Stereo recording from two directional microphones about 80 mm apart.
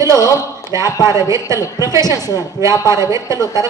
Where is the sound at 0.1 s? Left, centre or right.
Left.